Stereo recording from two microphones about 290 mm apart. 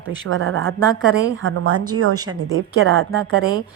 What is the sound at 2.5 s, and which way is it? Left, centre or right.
Speech, right.